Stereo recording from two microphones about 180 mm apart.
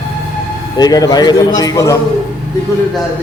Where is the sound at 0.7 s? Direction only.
20° left (ahead or behind).